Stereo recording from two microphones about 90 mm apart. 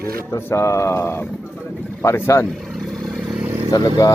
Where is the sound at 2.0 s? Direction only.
25° left (ahead or behind).